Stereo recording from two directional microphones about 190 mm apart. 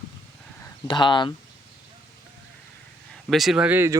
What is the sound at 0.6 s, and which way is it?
Speech, 25° left (ahead or behind).